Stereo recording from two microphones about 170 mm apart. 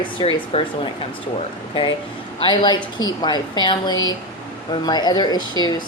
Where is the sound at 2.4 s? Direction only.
25° left (ahead or behind).